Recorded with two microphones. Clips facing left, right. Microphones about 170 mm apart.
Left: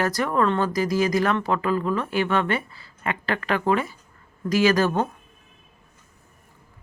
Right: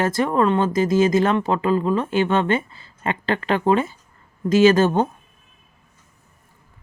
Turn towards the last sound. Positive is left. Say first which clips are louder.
# right 5 dB
turn(degrees=-25)  # may be behind; listen again after turning